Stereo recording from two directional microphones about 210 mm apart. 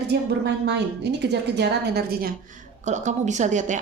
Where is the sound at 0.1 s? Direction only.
55° right (ahead or behind).